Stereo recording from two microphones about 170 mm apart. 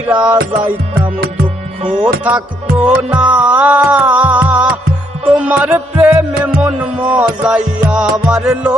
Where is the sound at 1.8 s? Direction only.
40° right (ahead or behind).